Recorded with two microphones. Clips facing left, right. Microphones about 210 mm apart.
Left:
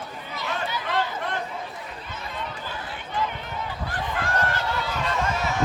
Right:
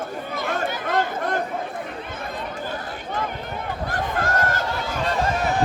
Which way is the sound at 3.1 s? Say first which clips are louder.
Even; 55° right (ahead or behind).